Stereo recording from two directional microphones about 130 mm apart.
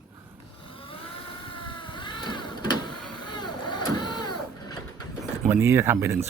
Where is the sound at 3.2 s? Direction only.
35° left (ahead or behind).